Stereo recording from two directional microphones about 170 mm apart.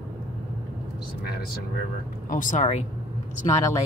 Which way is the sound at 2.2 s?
50° left (ahead or behind).